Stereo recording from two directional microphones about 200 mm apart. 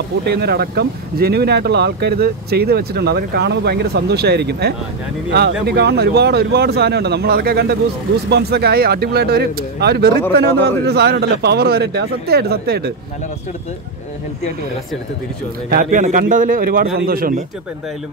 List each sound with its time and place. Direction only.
0.2 s speech: 55° right (ahead or behind)
15.7 s a man's voice: 40° right (ahead or behind)